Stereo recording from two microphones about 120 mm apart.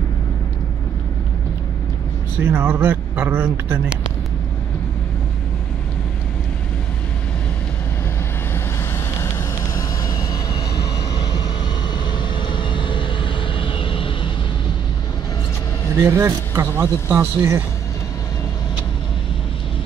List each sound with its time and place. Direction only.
2.5 s speech: 15° right (ahead or behind)
9.8 s vehicle: 30° left (ahead or behind)
11.9 s vehicle: 40° left (ahead or behind)
16.0 s speech: 20° right (ahead or behind)